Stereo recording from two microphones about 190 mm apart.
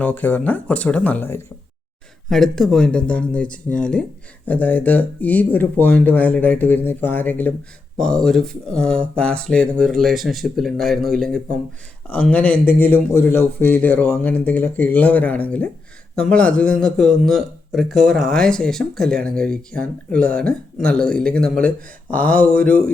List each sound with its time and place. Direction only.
0.0 s a man's voice: 10° left (ahead or behind)